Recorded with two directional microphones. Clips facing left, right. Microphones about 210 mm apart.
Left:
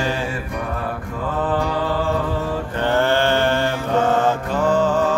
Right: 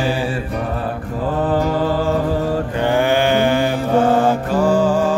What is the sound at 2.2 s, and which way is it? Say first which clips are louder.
Mantra: right 5 dB; 40° right (ahead or behind).